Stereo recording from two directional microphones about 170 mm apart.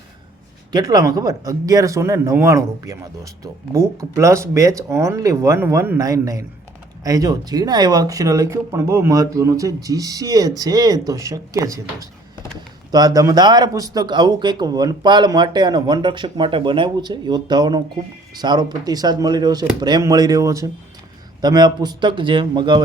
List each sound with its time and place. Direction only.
0.7 s speech: 25° right (ahead or behind)